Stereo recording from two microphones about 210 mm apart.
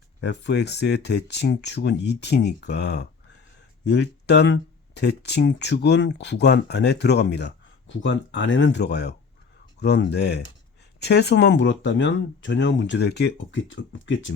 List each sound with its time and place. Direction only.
0.2 s speech: 55° left (ahead or behind)